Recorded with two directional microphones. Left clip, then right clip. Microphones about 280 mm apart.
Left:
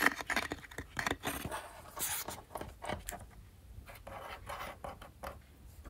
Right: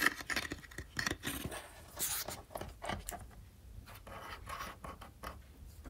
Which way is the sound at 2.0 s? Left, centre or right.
Centre.